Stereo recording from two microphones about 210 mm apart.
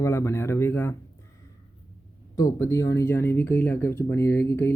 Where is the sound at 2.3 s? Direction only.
15° left (ahead or behind).